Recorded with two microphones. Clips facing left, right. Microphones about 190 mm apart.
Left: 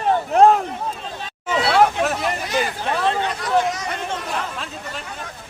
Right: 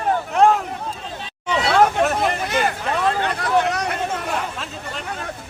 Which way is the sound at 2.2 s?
55° right (ahead or behind).